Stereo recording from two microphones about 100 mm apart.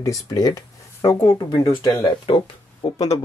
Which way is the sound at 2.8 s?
90° left.